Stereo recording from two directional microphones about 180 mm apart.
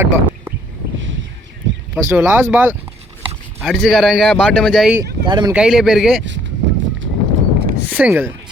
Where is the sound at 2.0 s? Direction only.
10° right (ahead or behind).